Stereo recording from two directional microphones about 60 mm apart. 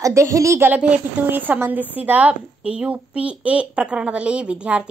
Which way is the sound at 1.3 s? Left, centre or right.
Right.